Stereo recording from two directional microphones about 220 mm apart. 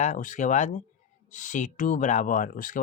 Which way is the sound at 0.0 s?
35° left (ahead or behind).